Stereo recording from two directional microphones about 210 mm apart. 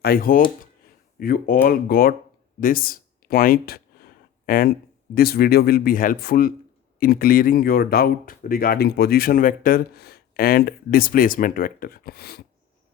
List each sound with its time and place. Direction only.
0.0 s speech: 45° left (ahead or behind)
2.6 s a sound: 40° left (ahead or behind)
5.1 s speech: 45° left (ahead or behind)